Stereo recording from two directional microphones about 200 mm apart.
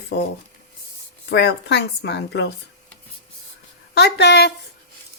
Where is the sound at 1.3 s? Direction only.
55° left (ahead or behind).